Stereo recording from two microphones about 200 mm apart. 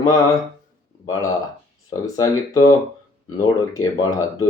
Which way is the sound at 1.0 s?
15° left (ahead or behind).